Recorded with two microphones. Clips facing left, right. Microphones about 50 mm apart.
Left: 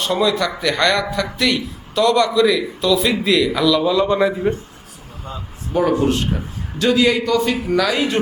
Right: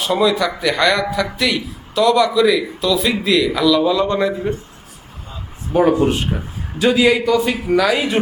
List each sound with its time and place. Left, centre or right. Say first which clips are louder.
0.0 s a man's voice: right 2 dB; centre
5.7 s speech: right 3 dB; right
6.1 s a man's voice: even; centre